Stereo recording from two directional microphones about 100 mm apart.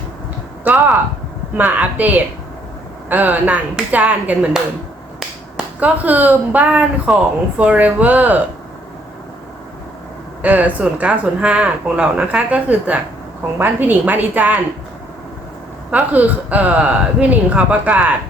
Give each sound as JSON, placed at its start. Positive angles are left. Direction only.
{"t": 0.6, "sound": "speech", "side_deg": -20}
{"t": 10.4, "sound": "speech", "side_deg": -15}
{"t": 15.9, "sound": "speech", "side_deg": -15}